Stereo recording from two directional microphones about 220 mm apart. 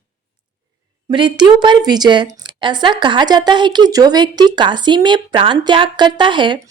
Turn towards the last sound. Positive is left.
turn(degrees=-20)  # may be behind; listen again after turning